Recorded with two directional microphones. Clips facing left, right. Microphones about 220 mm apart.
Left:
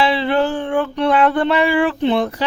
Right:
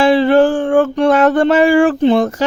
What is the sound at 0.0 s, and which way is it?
Mantra, 45° right (ahead or behind).